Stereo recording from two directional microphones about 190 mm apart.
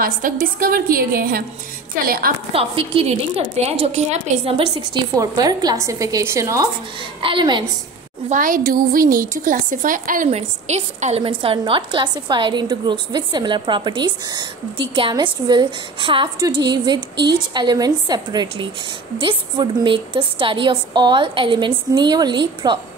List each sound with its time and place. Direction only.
0.0 s a woman's voice: 50° right (ahead or behind)
2.5 s a woman's voice: 30° right (ahead or behind)
7.2 s a woman's voice: 25° right (ahead or behind)
8.3 s a woman's voice: 45° right (ahead or behind); by 22.8 s 25° right (ahead or behind)